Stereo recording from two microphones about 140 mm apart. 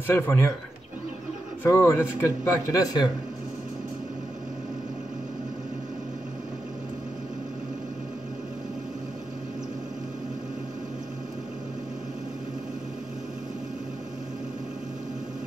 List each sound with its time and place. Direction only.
0.0 s speech: 15° left (ahead or behind)
1.6 s a man's voice: 20° left (ahead or behind)